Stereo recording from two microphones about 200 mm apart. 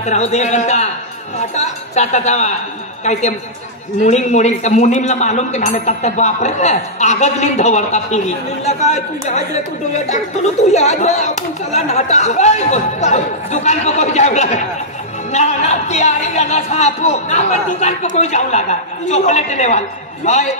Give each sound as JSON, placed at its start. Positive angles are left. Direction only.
{"t": 0.0, "sound": "a man's voice", "side_deg": 35}
{"t": 2.0, "sound": "a man's voice", "side_deg": 35}
{"t": 10.7, "sound": "a man's voice", "side_deg": 35}